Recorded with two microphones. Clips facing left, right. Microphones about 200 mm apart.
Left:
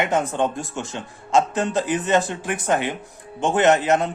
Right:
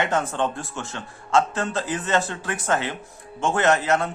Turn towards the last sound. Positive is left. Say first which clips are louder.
# left 3 dB
turn(degrees=20)  # may be behind; listen again after turning